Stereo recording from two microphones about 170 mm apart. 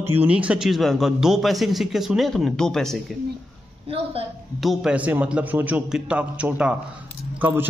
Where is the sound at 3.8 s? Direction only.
35° right (ahead or behind).